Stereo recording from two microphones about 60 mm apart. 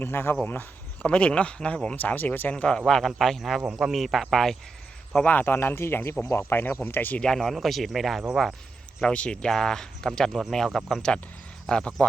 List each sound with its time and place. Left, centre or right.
0.0 s speech: left
1.0 s speech: centre
2.0 s speech: left
2.5 s speech: centre
5.1 s speech: left
7.2 s speech: centre
9.1 s speech: centre
11.7 s speech: centre